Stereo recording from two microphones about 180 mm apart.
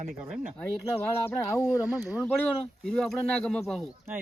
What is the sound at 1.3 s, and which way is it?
Speech, 15° left (ahead or behind).